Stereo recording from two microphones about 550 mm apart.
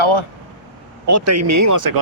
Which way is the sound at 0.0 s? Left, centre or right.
Left.